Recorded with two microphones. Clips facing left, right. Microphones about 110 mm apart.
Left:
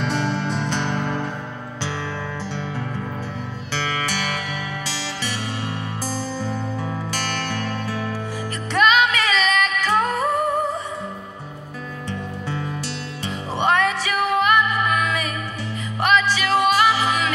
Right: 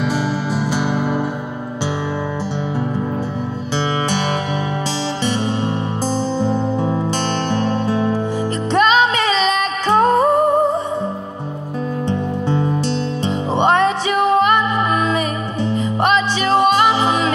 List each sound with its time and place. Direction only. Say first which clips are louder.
0.0 s music: right 3 dB; 5° right (ahead or behind)
3.7 s music: right 6 dB; 25° right (ahead or behind)
12.1 s music: right 8 dB; 25° right (ahead or behind)